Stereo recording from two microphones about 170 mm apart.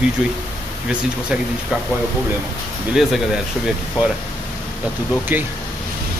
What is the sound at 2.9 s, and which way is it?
Speech, centre (ahead or behind).